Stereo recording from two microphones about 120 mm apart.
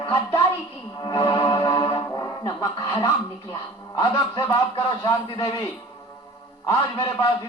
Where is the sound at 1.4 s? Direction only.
40° left (ahead or behind).